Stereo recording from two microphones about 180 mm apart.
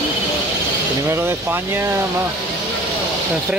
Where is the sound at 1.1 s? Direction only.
15° right (ahead or behind).